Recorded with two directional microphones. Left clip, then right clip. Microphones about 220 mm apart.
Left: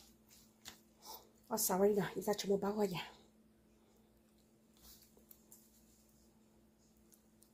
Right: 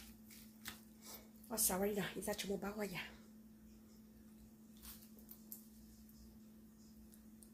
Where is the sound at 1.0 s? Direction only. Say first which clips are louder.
Left 3 dB; 30° left (ahead or behind).